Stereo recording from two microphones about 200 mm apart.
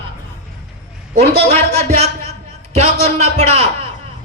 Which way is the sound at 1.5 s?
30° right (ahead or behind).